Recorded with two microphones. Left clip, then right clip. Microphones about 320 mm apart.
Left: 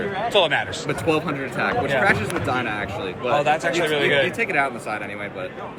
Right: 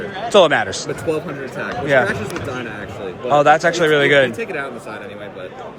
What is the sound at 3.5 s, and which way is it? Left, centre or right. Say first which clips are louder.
Speech: right 5 dB; right.